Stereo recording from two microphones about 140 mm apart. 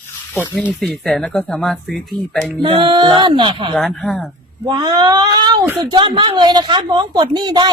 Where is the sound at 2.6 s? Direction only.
35° right (ahead or behind).